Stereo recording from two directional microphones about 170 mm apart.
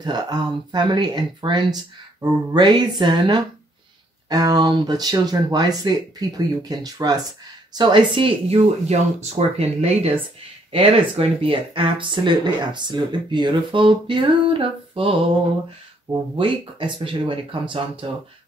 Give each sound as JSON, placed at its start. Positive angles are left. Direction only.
{"t": 0.0, "sound": "speech", "side_deg": -25}